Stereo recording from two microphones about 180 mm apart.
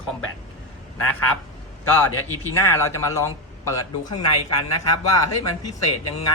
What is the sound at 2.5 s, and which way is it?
A man's voice, 15° left (ahead or behind).